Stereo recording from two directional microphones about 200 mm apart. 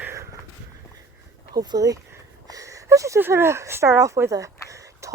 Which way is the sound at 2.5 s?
15° right (ahead or behind).